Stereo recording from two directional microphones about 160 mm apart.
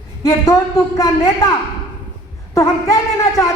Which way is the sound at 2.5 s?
20° left (ahead or behind).